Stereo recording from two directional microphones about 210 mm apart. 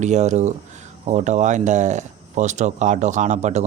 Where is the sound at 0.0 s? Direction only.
35° right (ahead or behind).